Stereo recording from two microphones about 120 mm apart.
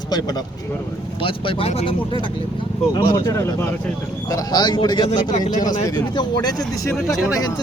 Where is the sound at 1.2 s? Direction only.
45° left (ahead or behind).